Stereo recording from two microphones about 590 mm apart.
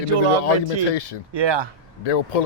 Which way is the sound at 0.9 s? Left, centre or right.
Left.